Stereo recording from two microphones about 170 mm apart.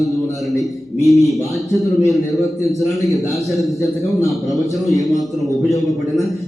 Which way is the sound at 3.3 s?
Centre (ahead or behind).